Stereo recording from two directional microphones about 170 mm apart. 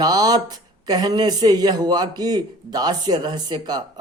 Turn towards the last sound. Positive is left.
turn(degrees=-25)  # may be behind; listen again after turning